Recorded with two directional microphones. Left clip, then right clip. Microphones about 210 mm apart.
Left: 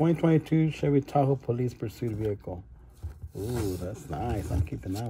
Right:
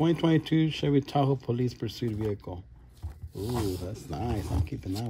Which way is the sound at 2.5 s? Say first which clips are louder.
Left 2 dB; 15° right (ahead or behind).